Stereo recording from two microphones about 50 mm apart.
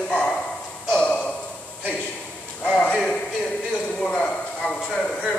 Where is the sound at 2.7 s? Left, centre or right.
Centre.